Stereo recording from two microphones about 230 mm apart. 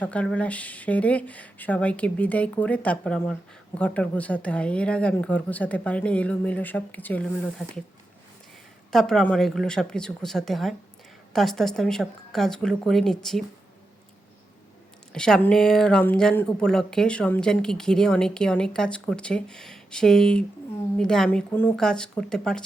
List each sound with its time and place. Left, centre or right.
0.0 s speech: centre
8.9 s speech: centre
15.1 s speech: centre